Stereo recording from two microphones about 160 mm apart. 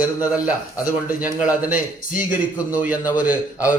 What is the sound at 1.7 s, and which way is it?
Speech, 55° left (ahead or behind).